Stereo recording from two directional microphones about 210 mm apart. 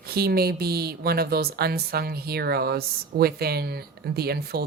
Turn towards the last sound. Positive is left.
turn(degrees=-50)  # may be behind; listen again after turning